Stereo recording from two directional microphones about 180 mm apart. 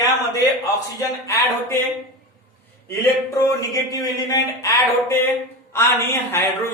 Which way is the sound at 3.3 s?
15° left (ahead or behind).